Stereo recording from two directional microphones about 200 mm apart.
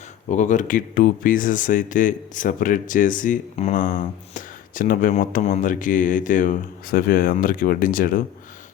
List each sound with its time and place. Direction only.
0.3 s speech: 40° left (ahead or behind)